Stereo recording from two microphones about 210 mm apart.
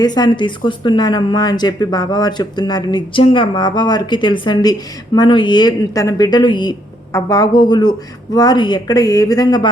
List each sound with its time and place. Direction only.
0.0 s a woman's voice: 20° left (ahead or behind)